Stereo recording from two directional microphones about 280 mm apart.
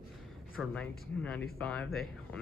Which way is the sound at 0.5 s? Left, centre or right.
Centre.